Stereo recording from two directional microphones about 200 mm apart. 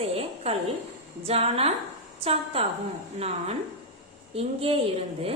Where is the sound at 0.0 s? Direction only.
30° right (ahead or behind).